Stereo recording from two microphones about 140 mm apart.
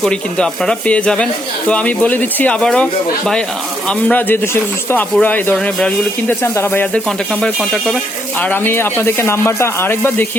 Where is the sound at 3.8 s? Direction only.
10° left (ahead or behind).